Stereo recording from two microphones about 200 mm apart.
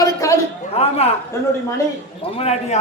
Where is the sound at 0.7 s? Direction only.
30° left (ahead or behind).